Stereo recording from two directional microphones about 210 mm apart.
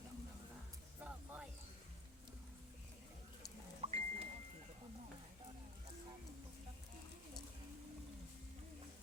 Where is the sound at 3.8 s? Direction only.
30° right (ahead or behind).